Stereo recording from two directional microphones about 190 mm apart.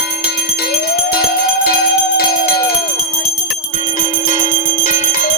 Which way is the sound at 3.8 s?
45° left (ahead or behind).